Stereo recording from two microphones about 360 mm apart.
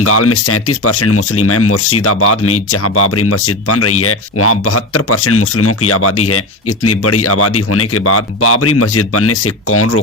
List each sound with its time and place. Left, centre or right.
0.0 s speech: left